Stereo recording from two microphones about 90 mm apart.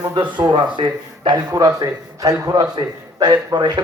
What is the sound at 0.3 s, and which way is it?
Speech, 60° right (ahead or behind).